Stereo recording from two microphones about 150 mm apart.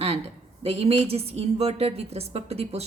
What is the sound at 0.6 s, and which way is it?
A woman's voice, 40° right (ahead or behind).